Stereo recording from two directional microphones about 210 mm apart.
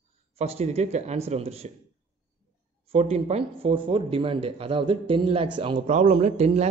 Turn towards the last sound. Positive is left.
turn(degrees=-30)  # may be behind; listen again after turning